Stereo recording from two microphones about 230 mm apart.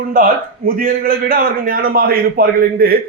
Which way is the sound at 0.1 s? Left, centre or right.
Right.